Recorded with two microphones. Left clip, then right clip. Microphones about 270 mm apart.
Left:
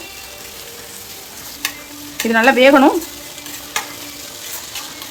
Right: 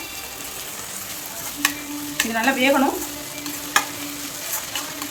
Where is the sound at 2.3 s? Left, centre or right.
Centre.